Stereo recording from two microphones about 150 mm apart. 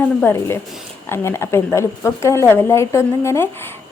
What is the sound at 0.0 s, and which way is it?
A woman's voice, 10° left (ahead or behind).